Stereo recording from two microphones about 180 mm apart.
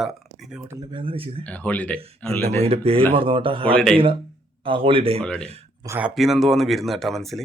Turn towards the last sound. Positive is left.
turn(degrees=0)  # may be behind; listen again after turning